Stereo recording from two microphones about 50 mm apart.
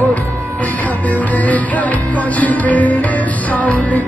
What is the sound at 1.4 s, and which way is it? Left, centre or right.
Music, left.